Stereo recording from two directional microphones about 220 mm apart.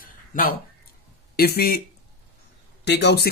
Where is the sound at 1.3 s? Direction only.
45° left (ahead or behind).